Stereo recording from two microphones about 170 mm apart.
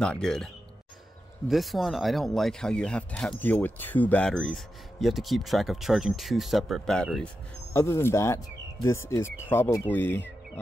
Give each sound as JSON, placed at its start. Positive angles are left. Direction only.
{"t": 0.0, "sound": "speech", "side_deg": 5}
{"t": 1.5, "sound": "speech", "side_deg": 0}
{"t": 7.7, "sound": "speech", "side_deg": 15}